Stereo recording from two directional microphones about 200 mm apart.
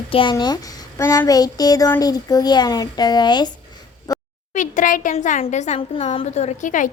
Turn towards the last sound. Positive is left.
turn(degrees=40)  # may be behind; listen again after turning